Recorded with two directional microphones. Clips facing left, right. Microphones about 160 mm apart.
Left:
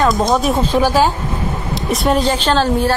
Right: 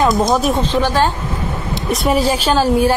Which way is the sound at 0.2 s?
Centre (ahead or behind).